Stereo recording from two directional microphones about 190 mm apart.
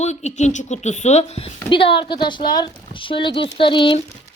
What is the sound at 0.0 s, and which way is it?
Speech, 35° left (ahead or behind).